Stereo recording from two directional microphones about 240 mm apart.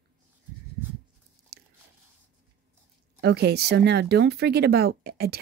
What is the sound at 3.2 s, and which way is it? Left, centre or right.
Speech, right.